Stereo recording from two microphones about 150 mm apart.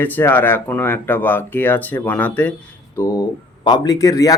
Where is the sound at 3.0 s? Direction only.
25° left (ahead or behind).